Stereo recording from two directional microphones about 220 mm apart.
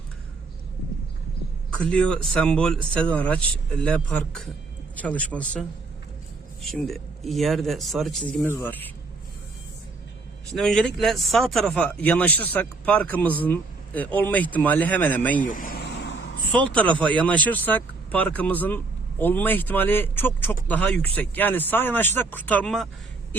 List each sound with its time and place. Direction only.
1.7 s a man's voice: 5° left (ahead or behind)
10.6 s speech: centre (ahead or behind)
15.4 s vehicle: 40° left (ahead or behind); by 16.4 s 55° left (ahead or behind)
16.5 s speech: 5° left (ahead or behind)